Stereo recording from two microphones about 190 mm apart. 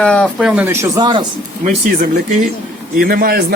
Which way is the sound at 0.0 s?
5° left (ahead or behind).